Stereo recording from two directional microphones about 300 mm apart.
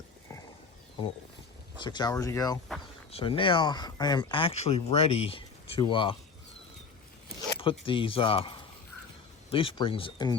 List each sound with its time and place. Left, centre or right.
1.8 s speech: centre
7.6 s speech: centre